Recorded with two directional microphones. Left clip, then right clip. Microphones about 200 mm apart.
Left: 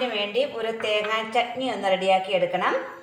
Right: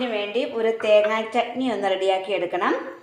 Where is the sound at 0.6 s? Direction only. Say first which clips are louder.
Right 7 dB; 40° right (ahead or behind).